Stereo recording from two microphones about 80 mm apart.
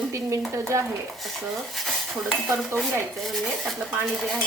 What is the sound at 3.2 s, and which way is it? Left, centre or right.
Speech, centre.